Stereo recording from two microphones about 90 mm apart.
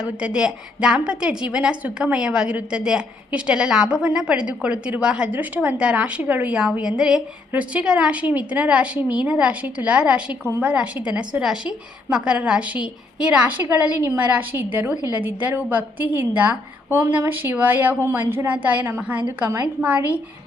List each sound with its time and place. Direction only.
0.0 s a woman's voice: 10° right (ahead or behind)